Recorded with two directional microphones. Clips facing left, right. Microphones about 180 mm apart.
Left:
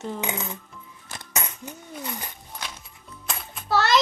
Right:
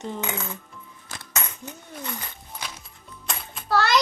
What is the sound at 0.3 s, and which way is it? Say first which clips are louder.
Child singing: left 1 dB; 15° left (ahead or behind).